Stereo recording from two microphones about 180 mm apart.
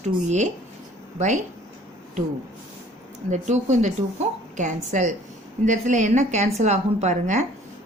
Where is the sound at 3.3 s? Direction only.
40° right (ahead or behind).